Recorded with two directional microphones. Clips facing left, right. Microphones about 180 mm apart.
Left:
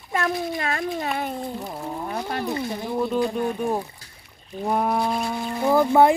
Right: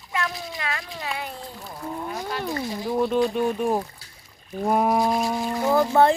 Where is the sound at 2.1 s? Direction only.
55° left (ahead or behind).